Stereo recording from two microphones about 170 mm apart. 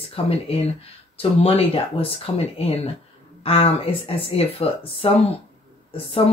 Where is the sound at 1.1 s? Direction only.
35° left (ahead or behind).